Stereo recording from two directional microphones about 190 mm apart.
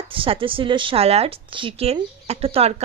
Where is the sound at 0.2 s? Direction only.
30° right (ahead or behind).